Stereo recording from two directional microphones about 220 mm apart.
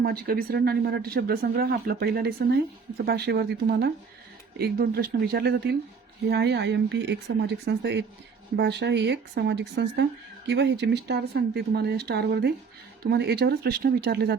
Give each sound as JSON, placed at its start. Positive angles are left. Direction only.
{"t": 0.0, "sound": "speech", "side_deg": -45}